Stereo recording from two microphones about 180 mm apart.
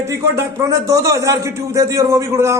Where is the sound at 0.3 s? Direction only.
15° right (ahead or behind).